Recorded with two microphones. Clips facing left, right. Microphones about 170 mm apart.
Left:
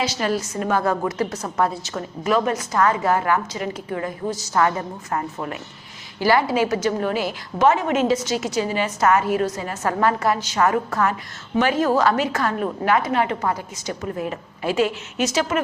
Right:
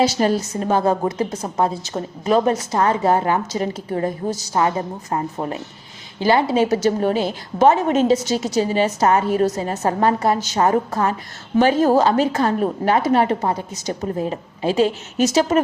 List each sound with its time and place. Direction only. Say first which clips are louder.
0.2 s a woman's voice: right 4 dB; 30° right (ahead or behind)